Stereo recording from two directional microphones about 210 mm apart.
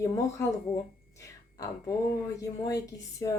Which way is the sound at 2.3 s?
15° left (ahead or behind).